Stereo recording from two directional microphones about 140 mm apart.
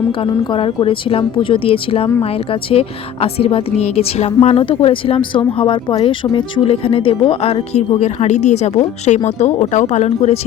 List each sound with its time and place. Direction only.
0.2 s a woman's voice: 40° left (ahead or behind)